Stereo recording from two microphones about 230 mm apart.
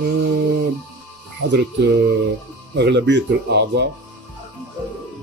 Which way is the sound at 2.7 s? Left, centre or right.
Right.